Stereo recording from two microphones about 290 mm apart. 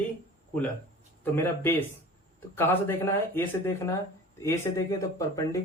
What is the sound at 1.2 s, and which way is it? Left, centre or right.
Speech, centre.